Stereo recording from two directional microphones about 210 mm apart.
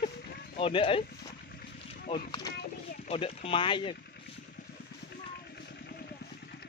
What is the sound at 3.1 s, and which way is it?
Speech, 25° left (ahead or behind).